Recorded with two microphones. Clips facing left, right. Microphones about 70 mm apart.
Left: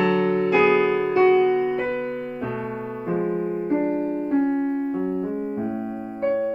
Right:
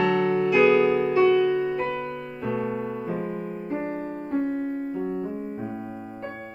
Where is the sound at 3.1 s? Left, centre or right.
Left.